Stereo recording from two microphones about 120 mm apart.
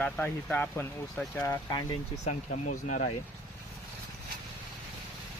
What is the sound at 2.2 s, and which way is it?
Speech, 90° left.